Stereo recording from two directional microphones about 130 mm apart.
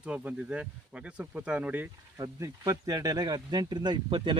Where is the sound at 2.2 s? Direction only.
25° right (ahead or behind).